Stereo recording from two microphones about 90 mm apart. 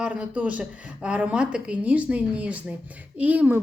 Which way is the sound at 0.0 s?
15° right (ahead or behind).